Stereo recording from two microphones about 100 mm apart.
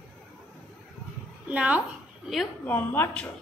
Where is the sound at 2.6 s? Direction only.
15° left (ahead or behind).